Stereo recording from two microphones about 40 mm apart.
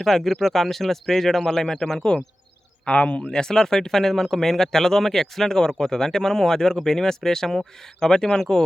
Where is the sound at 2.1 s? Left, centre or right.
Left.